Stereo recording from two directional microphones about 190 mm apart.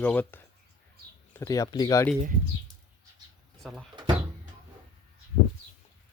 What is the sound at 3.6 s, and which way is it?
Speech, centre (ahead or behind).